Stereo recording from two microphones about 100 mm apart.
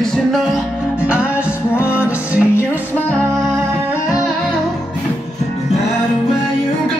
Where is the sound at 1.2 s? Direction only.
25° left (ahead or behind).